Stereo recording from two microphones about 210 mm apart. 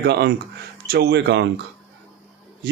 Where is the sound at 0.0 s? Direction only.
50° right (ahead or behind).